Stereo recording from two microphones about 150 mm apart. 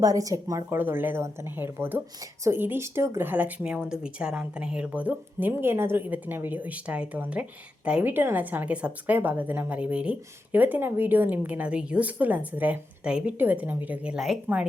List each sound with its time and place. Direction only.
0.0 s a woman's voice: 25° right (ahead or behind)